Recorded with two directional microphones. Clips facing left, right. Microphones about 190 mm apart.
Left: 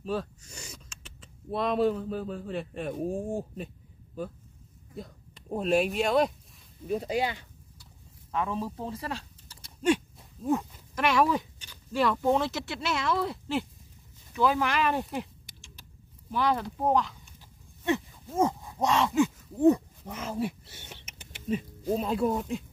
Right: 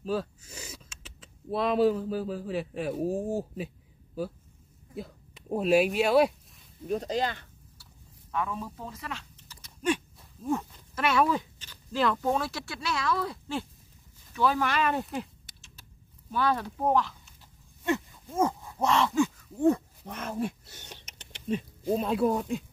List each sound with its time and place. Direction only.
0.0 s speech: centre (ahead or behind)
6.9 s speech: 10° left (ahead or behind)
8.3 s speech: 25° left (ahead or behind)
10.4 s speech: 10° left (ahead or behind)
12.3 s speech: 20° left (ahead or behind)
14.5 s speech: 10° left (ahead or behind)
18.4 s speech: 20° left (ahead or behind); by 22.7 s centre (ahead or behind)